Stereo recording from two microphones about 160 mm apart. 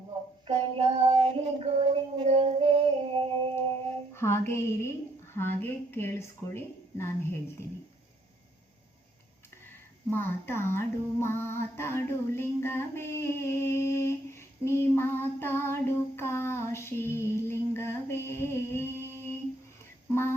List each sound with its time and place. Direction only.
0.4 s a sound: 35° right (ahead or behind)
4.1 s a woman's voice: 15° left (ahead or behind)
10.1 s female singing: 15° left (ahead or behind)